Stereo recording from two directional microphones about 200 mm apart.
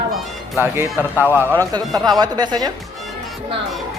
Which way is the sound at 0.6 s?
10° right (ahead or behind).